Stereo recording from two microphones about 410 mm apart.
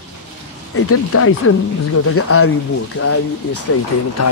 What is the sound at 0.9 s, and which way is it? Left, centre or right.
Speech, left.